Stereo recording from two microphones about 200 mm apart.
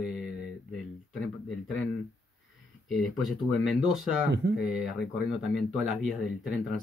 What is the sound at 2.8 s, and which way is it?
Speech, centre (ahead or behind).